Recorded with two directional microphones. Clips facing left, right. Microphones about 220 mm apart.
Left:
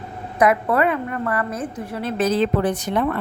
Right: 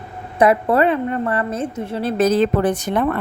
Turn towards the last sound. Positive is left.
turn(degrees=-50)  # may be behind; listen again after turning